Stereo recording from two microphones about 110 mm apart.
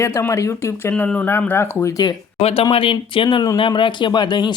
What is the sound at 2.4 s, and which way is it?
Speech, 65° left (ahead or behind).